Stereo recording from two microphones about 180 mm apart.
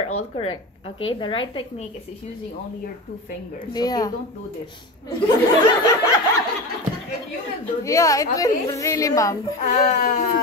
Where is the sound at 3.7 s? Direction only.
20° left (ahead or behind).